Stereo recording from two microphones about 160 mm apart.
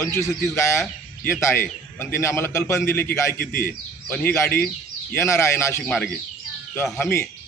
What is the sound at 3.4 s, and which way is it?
Speech, 75° left (ahead or behind).